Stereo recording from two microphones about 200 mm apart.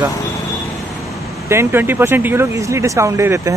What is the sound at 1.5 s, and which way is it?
Speech, 10° right (ahead or behind).